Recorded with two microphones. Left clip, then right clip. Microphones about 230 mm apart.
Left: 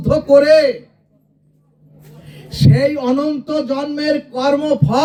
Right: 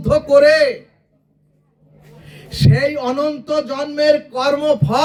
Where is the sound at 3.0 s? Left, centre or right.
Right.